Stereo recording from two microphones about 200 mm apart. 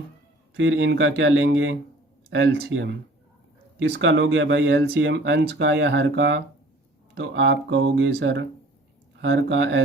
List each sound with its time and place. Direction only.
0.5 s speech: 65° right (ahead or behind)